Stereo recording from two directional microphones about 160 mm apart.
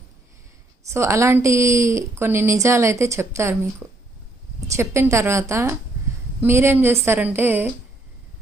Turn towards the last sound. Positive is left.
turn(degrees=-15)  # may be behind; listen again after turning